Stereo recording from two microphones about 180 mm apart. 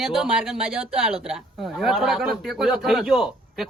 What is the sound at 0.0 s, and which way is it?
Speech, centre (ahead or behind).